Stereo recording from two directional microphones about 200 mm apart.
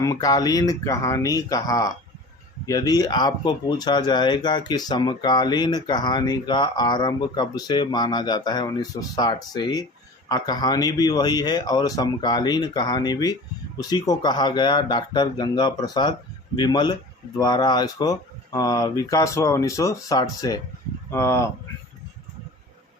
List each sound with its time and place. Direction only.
0.0 s speech: 15° left (ahead or behind)